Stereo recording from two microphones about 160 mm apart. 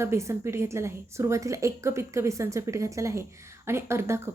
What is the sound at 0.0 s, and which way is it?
A woman's voice, 15° right (ahead or behind).